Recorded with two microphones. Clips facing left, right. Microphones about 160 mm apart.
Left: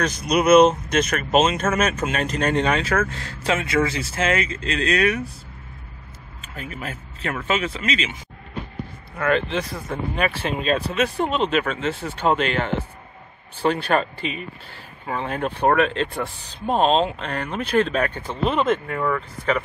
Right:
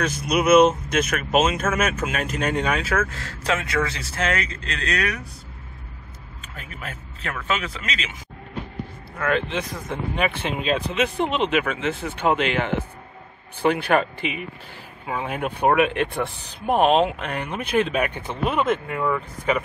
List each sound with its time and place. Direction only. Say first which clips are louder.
0.0 s speech: left 2 dB; 5° right (ahead or behind)
6.4 s a man's voice: left 4 dB; centre (ahead or behind)
9.6 s speech: left 1 dB; 15° right (ahead or behind)